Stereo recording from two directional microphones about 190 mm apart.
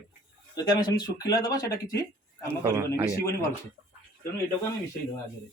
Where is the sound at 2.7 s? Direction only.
15° right (ahead or behind).